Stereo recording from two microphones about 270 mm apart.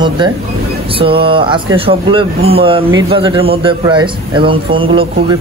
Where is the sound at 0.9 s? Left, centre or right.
Centre.